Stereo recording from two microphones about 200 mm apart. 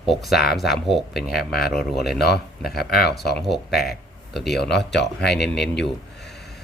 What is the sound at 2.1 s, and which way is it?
Speech, 55° left (ahead or behind).